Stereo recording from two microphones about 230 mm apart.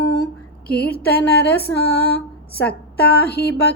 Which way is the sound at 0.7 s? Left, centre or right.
Centre.